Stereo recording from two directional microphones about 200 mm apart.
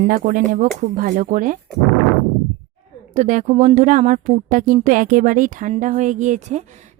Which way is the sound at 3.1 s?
40° right (ahead or behind).